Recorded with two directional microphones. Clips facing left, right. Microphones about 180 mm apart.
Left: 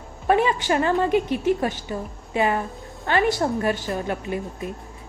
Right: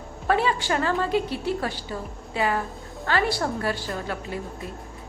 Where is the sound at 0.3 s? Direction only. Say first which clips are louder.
Left 3 dB; 20° left (ahead or behind).